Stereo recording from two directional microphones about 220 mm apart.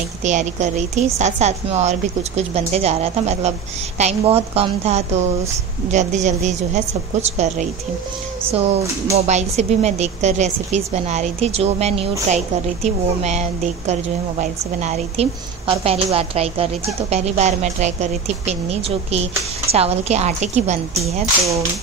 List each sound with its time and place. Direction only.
0.2 s a woman's voice: 35° right (ahead or behind)
9.1 s a woman's voice: 30° right (ahead or behind)
21.0 s speech: 15° right (ahead or behind)